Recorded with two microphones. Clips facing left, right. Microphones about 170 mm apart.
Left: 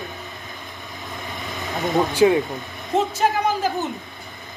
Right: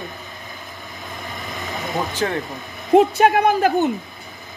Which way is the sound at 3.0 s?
65° right (ahead or behind).